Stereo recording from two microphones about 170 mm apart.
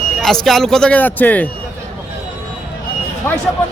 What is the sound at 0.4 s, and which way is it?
Speech, centre (ahead or behind).